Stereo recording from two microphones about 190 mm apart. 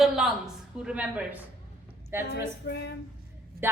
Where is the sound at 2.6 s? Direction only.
60° left (ahead or behind).